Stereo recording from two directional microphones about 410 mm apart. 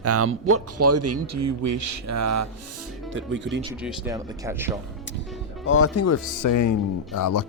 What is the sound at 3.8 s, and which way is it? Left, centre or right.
Speech, centre.